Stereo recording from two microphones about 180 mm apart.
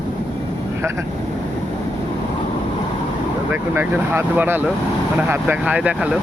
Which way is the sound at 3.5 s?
15° right (ahead or behind).